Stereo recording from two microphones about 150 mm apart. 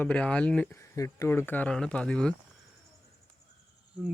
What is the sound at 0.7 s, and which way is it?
Speech, 20° left (ahead or behind).